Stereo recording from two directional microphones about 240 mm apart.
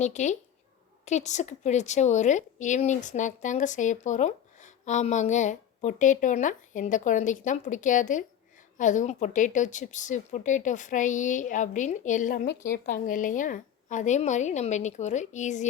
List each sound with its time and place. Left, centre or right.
0.0 s a woman's voice: left